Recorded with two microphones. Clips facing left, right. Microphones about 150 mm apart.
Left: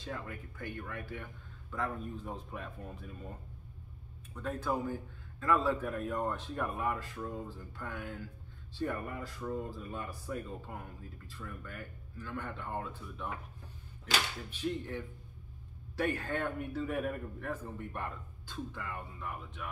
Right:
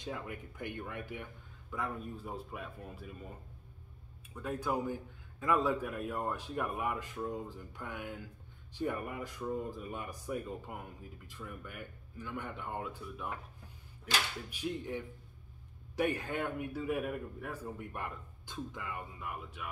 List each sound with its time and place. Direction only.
0.0 s speech: 15° right (ahead or behind)
4.3 s speech: 10° right (ahead or behind)
14.5 s speech: 15° right (ahead or behind)